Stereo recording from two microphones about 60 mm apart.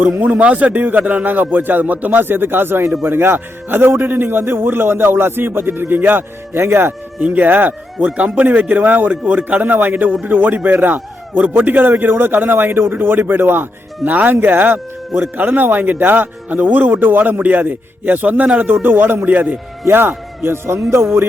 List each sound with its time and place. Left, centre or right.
0.0 s a man's voice: right
7.2 s a man's voice: right